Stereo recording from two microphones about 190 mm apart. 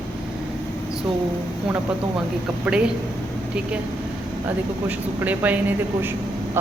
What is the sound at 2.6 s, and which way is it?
Speech, 5° right (ahead or behind).